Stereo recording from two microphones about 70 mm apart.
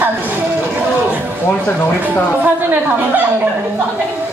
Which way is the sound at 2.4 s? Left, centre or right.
Right.